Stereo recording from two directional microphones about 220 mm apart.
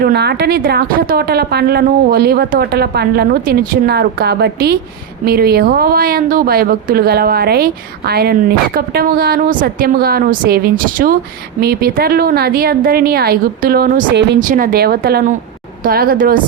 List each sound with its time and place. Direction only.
0.0 s a woman's voice: 45° right (ahead or behind)